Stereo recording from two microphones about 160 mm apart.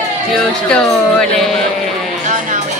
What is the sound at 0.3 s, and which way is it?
Speech, 5° left (ahead or behind).